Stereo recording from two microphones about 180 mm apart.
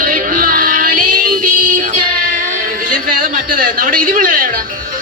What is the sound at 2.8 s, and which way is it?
Speech, 50° right (ahead or behind).